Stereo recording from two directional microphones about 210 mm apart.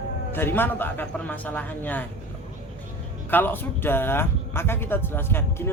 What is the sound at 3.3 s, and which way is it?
Speech, 10° left (ahead or behind).